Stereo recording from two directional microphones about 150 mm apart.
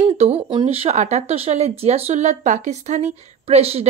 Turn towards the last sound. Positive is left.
turn(degrees=-45)  # may be behind; listen again after turning